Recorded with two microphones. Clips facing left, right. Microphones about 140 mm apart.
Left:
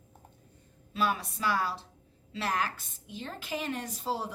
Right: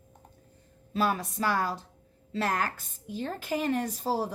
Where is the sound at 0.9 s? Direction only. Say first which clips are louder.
Right 3 dB; 35° right (ahead or behind).